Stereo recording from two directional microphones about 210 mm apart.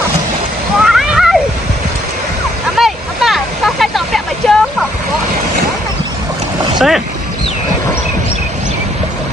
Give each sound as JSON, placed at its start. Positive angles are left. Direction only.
{"t": 0.9, "sound": "splash", "side_deg": 0}
{"t": 2.7, "sound": "a sound", "side_deg": 0}
{"t": 6.7, "sound": "boat", "side_deg": 0}